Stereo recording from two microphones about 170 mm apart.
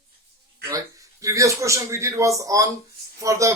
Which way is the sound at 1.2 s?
20° right (ahead or behind).